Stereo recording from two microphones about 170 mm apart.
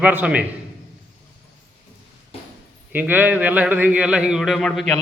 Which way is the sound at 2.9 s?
10° right (ahead or behind).